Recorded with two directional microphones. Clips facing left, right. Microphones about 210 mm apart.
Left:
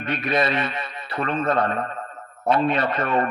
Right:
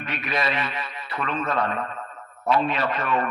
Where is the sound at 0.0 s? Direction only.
50° left (ahead or behind).